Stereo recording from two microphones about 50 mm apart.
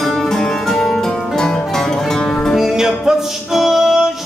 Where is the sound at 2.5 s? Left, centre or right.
Centre.